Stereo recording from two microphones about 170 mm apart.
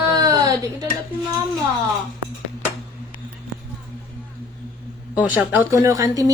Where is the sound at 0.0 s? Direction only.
20° right (ahead or behind).